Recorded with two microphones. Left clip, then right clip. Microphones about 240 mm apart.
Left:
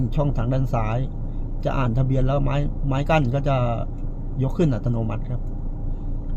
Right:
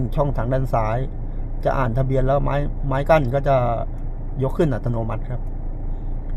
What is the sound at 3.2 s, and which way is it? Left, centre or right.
A man's voice, right.